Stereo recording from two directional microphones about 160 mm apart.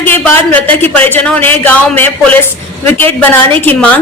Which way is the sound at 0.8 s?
10° left (ahead or behind).